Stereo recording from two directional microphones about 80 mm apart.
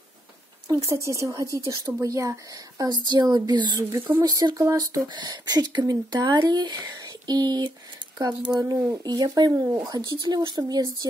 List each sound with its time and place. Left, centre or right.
0.8 s speech: right
2.8 s speech: right
4.2 s speech: right
4.6 s speech: right
5.0 s speech: right
10.1 s speech: right